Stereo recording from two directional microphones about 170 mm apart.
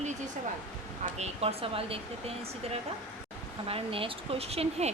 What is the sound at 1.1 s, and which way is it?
A woman's voice, 40° right (ahead or behind).